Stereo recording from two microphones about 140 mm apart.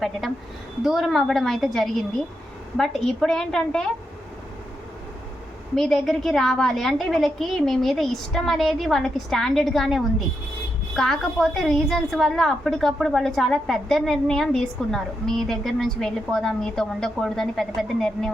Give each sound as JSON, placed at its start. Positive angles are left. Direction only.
{"t": 0.2, "sound": "a woman's voice", "side_deg": 0}
{"t": 5.7, "sound": "a woman's voice", "side_deg": 0}